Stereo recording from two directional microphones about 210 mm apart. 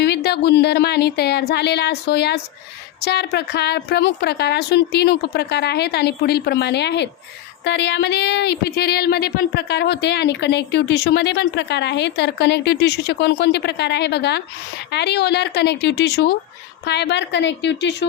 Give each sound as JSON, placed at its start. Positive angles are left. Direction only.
{"t": 0.0, "sound": "a woman's voice", "side_deg": 50}